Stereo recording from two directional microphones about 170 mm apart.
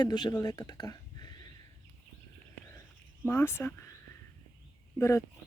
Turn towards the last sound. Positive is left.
turn(degrees=15)  # may be behind; listen again after turning